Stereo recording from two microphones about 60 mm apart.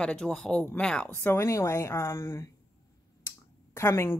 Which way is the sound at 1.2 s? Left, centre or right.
Left.